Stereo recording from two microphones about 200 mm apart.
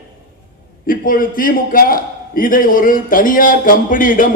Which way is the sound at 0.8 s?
45° left (ahead or behind).